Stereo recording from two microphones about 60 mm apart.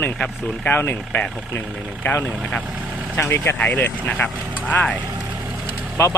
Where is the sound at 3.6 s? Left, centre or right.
Left.